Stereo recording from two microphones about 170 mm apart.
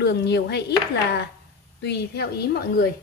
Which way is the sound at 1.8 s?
75° left (ahead or behind).